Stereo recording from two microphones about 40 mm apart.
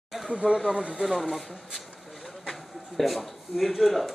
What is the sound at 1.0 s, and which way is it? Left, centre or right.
Speech, centre.